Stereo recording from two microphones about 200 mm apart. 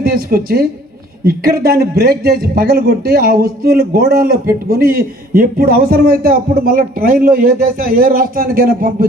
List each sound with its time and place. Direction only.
0.0 s speech: 50° right (ahead or behind)